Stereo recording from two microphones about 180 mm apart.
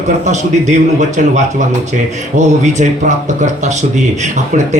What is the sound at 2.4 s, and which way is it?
Speech, 40° right (ahead or behind).